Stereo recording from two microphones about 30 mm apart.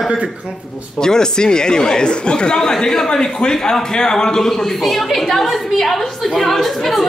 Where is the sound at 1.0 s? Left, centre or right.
Left.